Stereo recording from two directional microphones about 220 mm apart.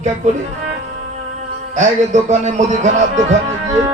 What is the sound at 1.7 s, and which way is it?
Speech, 30° right (ahead or behind).